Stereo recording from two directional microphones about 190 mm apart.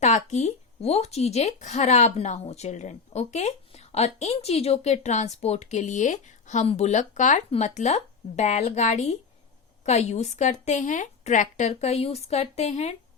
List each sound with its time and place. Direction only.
0.0 s speech: 40° left (ahead or behind)